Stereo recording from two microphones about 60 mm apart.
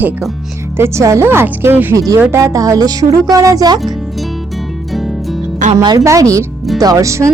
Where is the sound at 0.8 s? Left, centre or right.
Right.